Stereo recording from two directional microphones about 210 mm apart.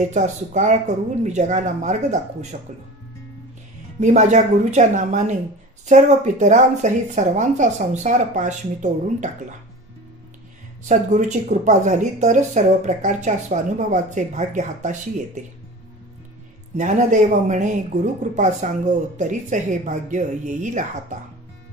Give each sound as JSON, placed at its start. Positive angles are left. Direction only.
{"t": 0.0, "sound": "speech", "side_deg": -35}
{"t": 4.0, "sound": "speech", "side_deg": -35}
{"t": 10.9, "sound": "speech", "side_deg": -35}
{"t": 16.7, "sound": "speech", "side_deg": -35}